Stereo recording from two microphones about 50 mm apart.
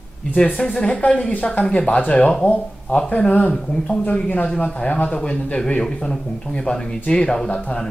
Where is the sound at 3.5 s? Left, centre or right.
Centre.